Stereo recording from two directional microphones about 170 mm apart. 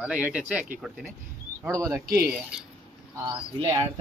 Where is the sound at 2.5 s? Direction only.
5° right (ahead or behind).